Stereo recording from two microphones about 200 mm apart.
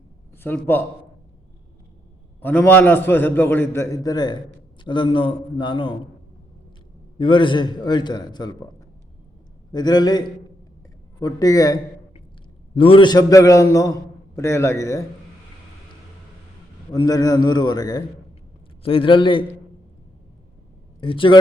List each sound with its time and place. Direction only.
0.4 s a man's voice: 10° left (ahead or behind)
2.4 s a man's voice: 10° left (ahead or behind)
7.2 s a man's voice: 25° left (ahead or behind)
9.7 s a man's voice: 20° left (ahead or behind)
12.8 s a man's voice: 25° left (ahead or behind)
16.9 s a man's voice: 20° left (ahead or behind)
21.0 s a man's voice: 25° left (ahead or behind)